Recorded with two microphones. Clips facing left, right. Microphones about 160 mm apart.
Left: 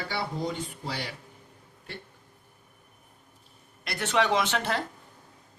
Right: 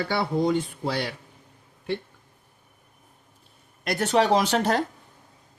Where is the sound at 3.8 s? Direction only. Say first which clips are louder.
Right 5 dB; 40° right (ahead or behind).